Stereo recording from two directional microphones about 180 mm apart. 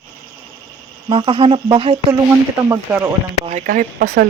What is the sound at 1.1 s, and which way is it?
Speech, 30° right (ahead or behind).